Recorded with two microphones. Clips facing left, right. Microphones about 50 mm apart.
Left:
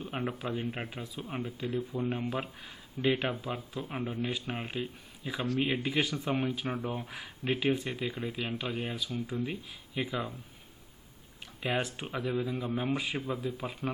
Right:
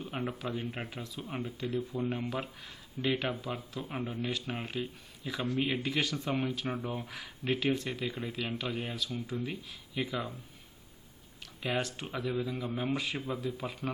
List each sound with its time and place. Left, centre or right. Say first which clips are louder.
0.3 s speech: left 2 dB; centre
11.6 s speech: left 1 dB; centre